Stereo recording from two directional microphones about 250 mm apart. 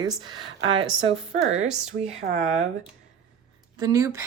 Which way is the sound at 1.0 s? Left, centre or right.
Right.